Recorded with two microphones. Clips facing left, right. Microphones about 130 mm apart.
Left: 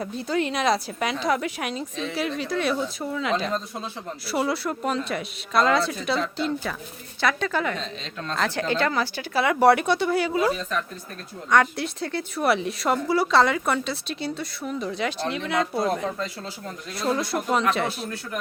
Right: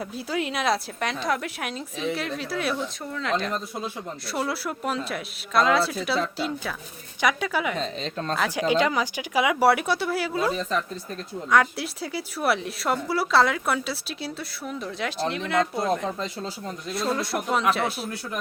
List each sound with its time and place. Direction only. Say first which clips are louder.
0.0 s speech: left 3 dB; 5° right (ahead or behind)
7.8 s a woman's voice: right 5 dB; 40° right (ahead or behind)
8.4 s speech: right 1 dB; 10° right (ahead or behind)
11.5 s speech: left 1 dB; 5° right (ahead or behind)